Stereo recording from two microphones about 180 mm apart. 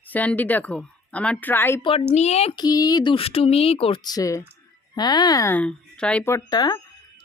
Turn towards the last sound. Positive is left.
turn(degrees=20)  # may be behind; listen again after turning